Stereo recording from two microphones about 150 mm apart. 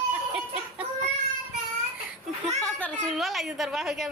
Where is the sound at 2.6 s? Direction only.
10° left (ahead or behind).